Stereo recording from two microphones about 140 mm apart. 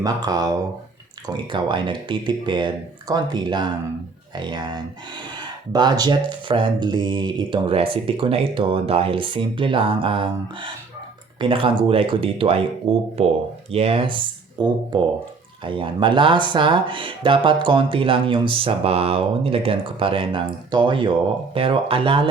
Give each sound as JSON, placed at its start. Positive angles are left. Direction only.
{"t": 0.0, "sound": "speech", "side_deg": -30}